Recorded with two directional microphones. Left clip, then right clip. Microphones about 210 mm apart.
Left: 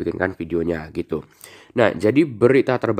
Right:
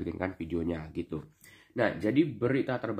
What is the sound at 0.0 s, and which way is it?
Speech, 35° left (ahead or behind).